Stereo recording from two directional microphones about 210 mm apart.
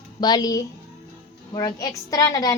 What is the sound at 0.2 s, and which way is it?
A woman's voice, 20° left (ahead or behind).